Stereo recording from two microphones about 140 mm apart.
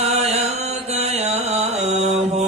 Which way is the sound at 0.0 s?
50° right (ahead or behind).